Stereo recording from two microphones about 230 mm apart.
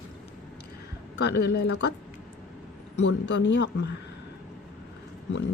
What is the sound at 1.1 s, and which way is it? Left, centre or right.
Speech, left.